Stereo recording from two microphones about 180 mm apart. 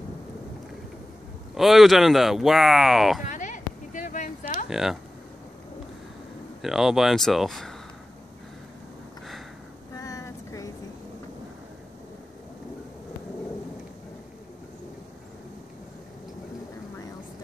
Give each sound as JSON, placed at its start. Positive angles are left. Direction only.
{"t": 1.6, "sound": "speech", "side_deg": 0}
{"t": 3.3, "sound": "a sound", "side_deg": 45}
{"t": 4.6, "sound": "speech", "side_deg": -5}
{"t": 6.6, "sound": "speech", "side_deg": 0}
{"t": 9.9, "sound": "vehicle", "side_deg": 20}